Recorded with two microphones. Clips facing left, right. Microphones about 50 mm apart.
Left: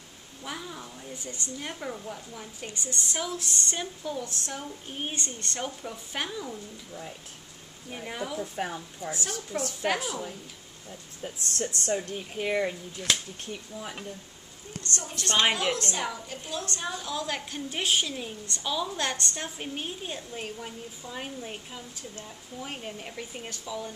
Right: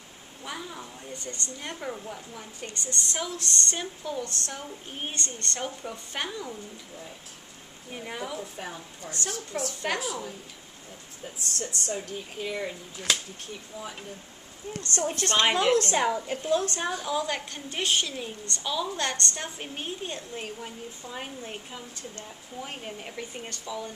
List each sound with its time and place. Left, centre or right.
0.4 s a woman's voice: centre
1.1 s a woman's voice: centre
2.6 s a woman's voice: centre
7.9 s a woman's voice: centre
11.5 s speech: left
13.0 s a woman's voice: centre
14.9 s a woman's voice: right
16.7 s a woman's voice: right
17.3 s a woman's voice: centre